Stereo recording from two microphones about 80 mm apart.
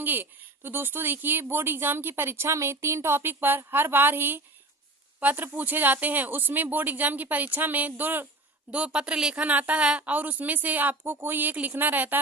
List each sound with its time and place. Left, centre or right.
0.0 s speech: right